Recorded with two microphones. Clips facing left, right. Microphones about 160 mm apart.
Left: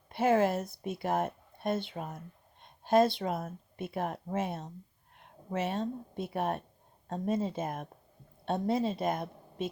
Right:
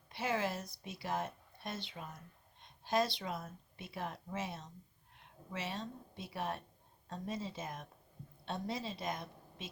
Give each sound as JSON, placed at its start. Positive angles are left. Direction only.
{"t": 0.1, "sound": "speech", "side_deg": 50}